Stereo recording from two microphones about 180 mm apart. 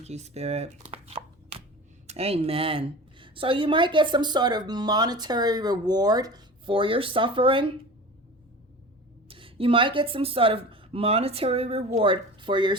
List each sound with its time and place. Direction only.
0.0 s speech: 40° right (ahead or behind)
1.0 s a sound: 35° right (ahead or behind)
2.0 s a woman's voice: 35° right (ahead or behind)
9.3 s a woman's voice: 30° right (ahead or behind)